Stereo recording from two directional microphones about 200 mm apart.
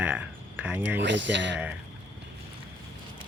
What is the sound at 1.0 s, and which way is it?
Speech, 65° right (ahead or behind).